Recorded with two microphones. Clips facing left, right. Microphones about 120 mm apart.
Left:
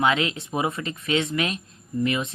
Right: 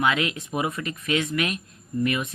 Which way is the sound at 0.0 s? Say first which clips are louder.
Left 1 dB; 30° left (ahead or behind).